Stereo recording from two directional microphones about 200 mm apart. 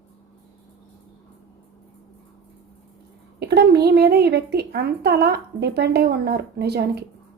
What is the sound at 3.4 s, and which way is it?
Speech, 55° right (ahead or behind).